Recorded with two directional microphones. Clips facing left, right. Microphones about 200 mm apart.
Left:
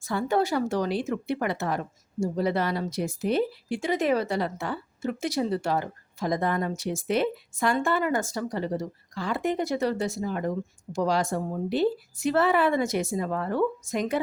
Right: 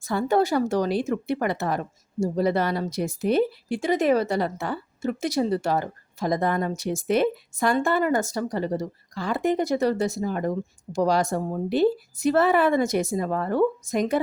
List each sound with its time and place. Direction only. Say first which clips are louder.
0.0 s a woman's voice: right 3 dB; 40° right (ahead or behind)